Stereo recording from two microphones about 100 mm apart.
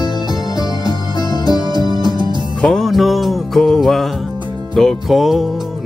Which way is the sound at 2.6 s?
5° left (ahead or behind).